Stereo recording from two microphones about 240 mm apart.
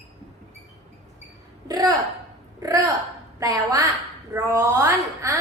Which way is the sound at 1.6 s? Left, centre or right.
Centre.